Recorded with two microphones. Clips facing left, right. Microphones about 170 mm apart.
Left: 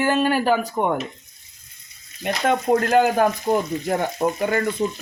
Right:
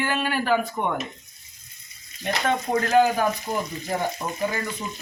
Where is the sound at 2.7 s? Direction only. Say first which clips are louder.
Left 2 dB; 60° left (ahead or behind).